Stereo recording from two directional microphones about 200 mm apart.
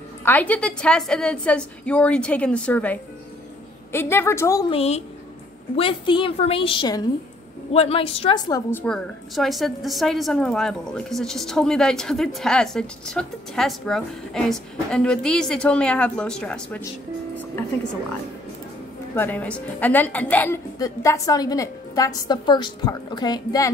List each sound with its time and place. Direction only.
0.2 s a woman's voice: 10° left (ahead or behind)
4.6 s a woman's voice: 30° left (ahead or behind); by 16.8 s 5° left (ahead or behind)
19.1 s a woman's voice: 10° left (ahead or behind)